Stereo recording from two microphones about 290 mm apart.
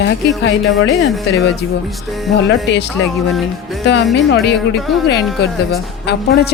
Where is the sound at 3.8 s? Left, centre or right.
Left.